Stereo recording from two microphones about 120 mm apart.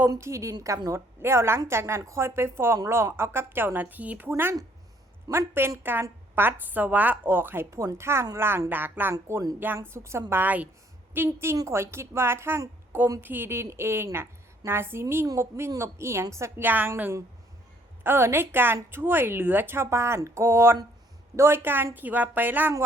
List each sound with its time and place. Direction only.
0.1 s a woman's voice: 25° right (ahead or behind)